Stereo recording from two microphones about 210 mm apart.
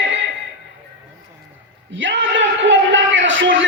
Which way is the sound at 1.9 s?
65° right (ahead or behind).